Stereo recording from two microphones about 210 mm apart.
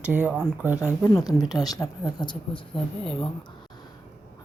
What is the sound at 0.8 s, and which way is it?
A woman's voice, 10° left (ahead or behind).